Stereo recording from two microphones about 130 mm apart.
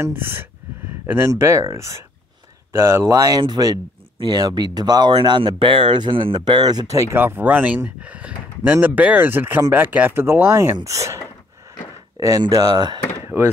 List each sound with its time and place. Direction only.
0.0 s speech: 15° right (ahead or behind)
12.2 s speech: 30° right (ahead or behind)
13.3 s speech: 15° right (ahead or behind)